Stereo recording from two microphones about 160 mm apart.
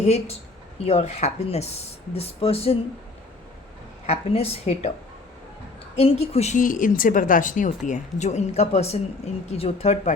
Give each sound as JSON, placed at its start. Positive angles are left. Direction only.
{"t": 0.0, "sound": "speech", "side_deg": 40}
{"t": 4.0, "sound": "speech", "side_deg": 40}
{"t": 6.0, "sound": "speech", "side_deg": 40}